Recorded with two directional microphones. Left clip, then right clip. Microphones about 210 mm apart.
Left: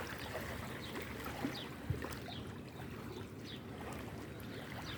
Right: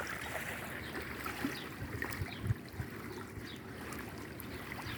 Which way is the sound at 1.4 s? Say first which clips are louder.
Right 2 dB; 45° right (ahead or behind).